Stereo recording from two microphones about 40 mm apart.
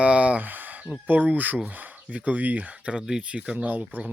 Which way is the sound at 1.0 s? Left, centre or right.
Right.